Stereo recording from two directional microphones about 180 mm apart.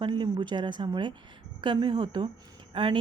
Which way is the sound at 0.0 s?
25° right (ahead or behind).